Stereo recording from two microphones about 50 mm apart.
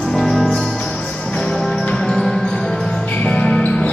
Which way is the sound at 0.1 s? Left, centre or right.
Centre.